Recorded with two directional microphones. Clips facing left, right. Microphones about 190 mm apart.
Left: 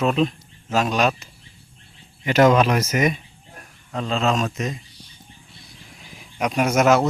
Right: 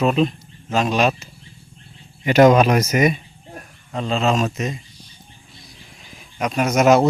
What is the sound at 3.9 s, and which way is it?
Speech, centre (ahead or behind).